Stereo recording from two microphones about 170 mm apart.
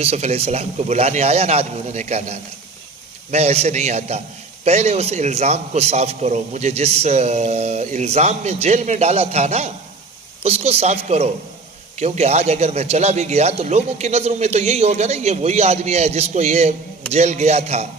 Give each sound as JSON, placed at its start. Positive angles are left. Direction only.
{"t": 0.0, "sound": "a man's voice", "side_deg": -40}